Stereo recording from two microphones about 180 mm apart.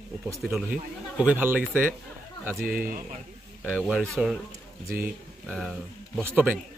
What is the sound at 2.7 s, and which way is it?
Speech, 50° right (ahead or behind).